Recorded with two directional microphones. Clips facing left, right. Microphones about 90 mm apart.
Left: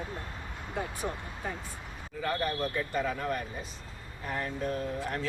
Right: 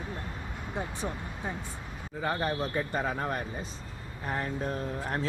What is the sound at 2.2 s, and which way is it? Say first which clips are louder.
Speech: right 1 dB; 30° right (ahead or behind).